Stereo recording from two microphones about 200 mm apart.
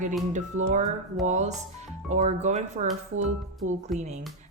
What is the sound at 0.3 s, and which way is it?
A woman's voice, 35° right (ahead or behind).